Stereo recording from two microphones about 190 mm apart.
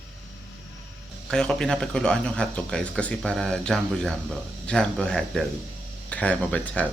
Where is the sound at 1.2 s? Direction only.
5° left (ahead or behind).